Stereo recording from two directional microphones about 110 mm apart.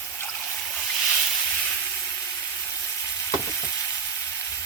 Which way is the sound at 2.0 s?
20° left (ahead or behind).